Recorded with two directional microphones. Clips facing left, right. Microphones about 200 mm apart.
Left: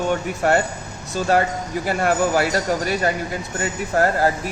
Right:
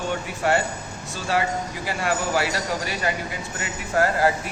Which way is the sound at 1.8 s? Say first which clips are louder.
Left 8 dB; 50° left (ahead or behind).